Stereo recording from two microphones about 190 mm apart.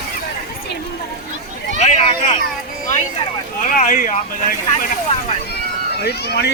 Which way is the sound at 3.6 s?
45° left (ahead or behind).